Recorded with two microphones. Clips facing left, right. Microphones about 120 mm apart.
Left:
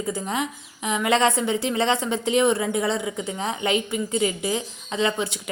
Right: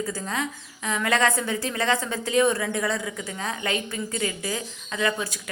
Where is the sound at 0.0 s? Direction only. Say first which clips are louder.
Left 3 dB; 20° left (ahead or behind).